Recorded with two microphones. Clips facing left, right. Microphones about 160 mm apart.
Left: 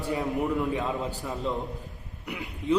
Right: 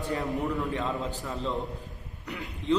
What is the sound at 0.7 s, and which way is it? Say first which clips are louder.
Speech: left 2 dB; 20° left (ahead or behind).